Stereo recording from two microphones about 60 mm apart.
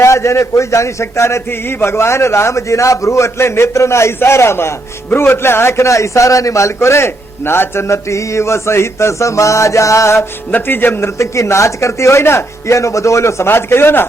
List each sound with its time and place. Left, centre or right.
0.0 s a man's voice: left
1.5 s a man's voice: left
10.2 s a man's voice: left
11.2 s a man's voice: left